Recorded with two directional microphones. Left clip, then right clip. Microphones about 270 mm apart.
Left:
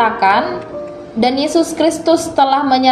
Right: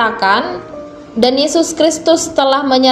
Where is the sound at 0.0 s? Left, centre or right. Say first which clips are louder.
Even; centre.